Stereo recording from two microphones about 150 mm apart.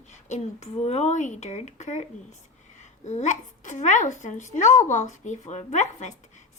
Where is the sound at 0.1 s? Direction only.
50° left (ahead or behind).